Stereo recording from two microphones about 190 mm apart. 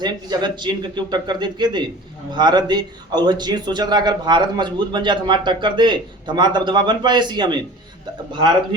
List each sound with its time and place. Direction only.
0.0 s speech: 25° right (ahead or behind)